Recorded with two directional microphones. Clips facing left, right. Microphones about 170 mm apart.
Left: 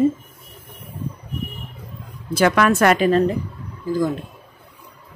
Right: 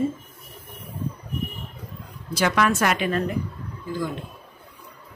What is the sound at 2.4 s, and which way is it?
Speech, 55° left (ahead or behind).